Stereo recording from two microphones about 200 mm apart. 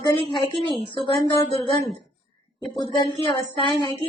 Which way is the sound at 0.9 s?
25° left (ahead or behind).